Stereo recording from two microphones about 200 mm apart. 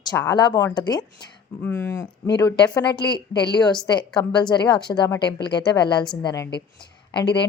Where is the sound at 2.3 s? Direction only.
20° left (ahead or behind).